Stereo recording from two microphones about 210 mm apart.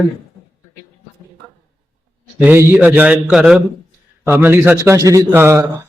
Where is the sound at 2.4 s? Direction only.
10° right (ahead or behind).